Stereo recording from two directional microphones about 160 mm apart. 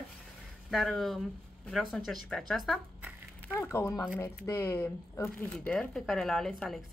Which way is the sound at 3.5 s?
20° left (ahead or behind).